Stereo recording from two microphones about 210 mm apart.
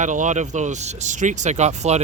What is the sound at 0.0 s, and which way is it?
Speech, 35° right (ahead or behind).